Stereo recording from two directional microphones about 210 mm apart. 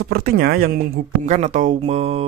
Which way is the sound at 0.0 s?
45° right (ahead or behind).